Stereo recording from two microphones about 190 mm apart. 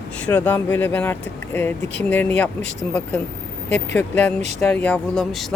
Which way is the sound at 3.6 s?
10° left (ahead or behind).